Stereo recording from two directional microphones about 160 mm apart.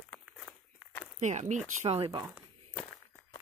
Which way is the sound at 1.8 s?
35° right (ahead or behind).